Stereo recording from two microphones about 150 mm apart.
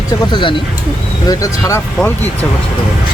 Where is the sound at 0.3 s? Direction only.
30° left (ahead or behind).